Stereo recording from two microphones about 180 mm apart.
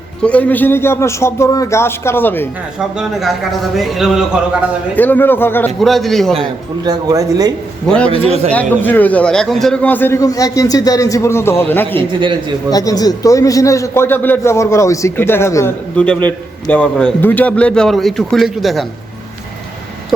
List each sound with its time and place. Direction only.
0.2 s a man's voice: 10° left (ahead or behind)
2.7 s speech: centre (ahead or behind)
4.9 s a man's voice: 10° left (ahead or behind)
5.8 s speech: centre (ahead or behind)
6.8 s speech: 20° right (ahead or behind)
7.9 s a man's voice: 5° left (ahead or behind)